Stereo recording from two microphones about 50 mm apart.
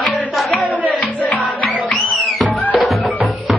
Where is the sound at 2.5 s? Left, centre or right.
Left.